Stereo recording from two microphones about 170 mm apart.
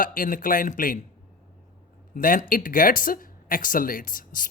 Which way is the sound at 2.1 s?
55° left (ahead or behind).